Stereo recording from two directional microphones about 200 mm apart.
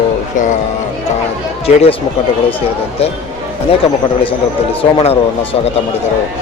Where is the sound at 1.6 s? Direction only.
30° left (ahead or behind).